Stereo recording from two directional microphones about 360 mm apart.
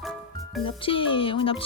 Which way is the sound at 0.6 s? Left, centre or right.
Centre.